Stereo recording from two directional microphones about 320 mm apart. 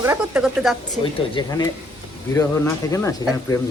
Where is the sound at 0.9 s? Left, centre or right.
Centre.